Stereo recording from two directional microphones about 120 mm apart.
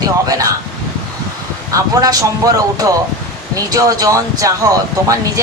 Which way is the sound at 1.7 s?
30° right (ahead or behind).